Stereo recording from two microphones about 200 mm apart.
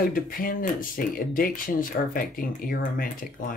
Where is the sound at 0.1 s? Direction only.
45° left (ahead or behind).